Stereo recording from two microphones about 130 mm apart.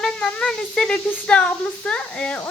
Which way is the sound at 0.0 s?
5° left (ahead or behind).